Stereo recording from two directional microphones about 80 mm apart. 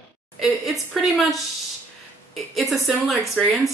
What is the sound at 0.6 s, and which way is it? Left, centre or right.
Speech, centre.